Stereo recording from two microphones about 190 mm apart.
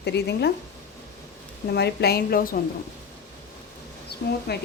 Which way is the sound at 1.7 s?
60° left (ahead or behind).